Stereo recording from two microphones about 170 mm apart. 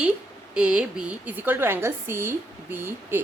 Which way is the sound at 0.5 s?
5° right (ahead or behind).